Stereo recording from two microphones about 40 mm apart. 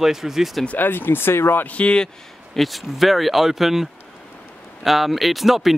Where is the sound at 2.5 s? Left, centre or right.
Centre.